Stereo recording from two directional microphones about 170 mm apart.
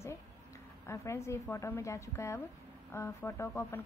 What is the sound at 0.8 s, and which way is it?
A woman's voice, 15° left (ahead or behind).